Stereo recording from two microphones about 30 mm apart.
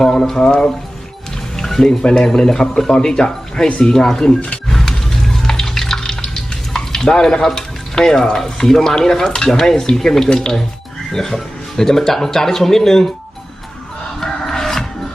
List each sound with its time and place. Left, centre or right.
0.2 s speech: centre
0.4 s speech: left
1.5 s speech: centre
4.4 s speech: left
4.7 s music: centre
5.5 s water: centre
7.9 s speech: centre
10.2 s speech: left
11.1 s speech: centre
14.2 s music: centre